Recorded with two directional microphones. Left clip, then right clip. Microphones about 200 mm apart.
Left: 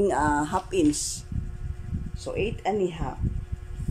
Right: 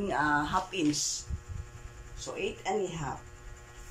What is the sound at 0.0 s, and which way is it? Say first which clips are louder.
Music: left 5 dB; 35° left (ahead or behind).